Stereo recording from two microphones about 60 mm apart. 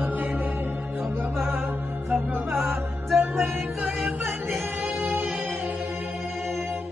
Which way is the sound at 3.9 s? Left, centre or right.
Centre.